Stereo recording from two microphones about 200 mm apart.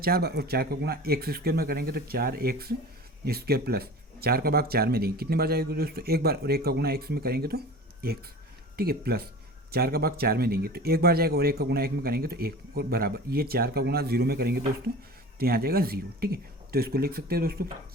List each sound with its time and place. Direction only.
0.0 s speech: 50° right (ahead or behind)
8.7 s speech: 50° right (ahead or behind)